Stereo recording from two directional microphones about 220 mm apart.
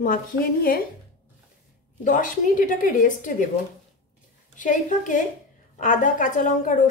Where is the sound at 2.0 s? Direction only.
35° left (ahead or behind).